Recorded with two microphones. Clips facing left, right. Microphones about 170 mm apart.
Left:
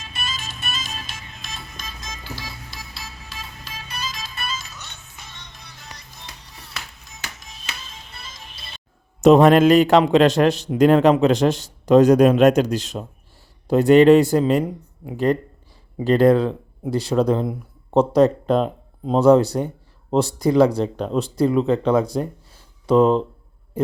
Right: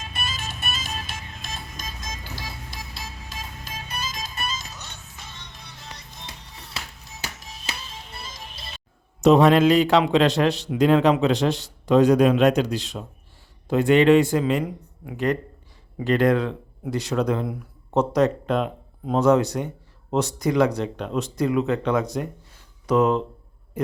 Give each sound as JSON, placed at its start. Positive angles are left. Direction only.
{"t": 0.0, "sound": "music", "side_deg": -55}
{"t": 6.7, "sound": "music", "side_deg": -35}
{"t": 9.2, "sound": "a man's voice", "side_deg": 50}
{"t": 23.8, "sound": "a sound", "side_deg": 30}